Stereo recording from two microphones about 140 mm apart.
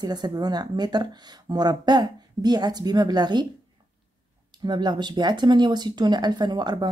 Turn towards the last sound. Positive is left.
turn(degrees=-30)  # may be behind; listen again after turning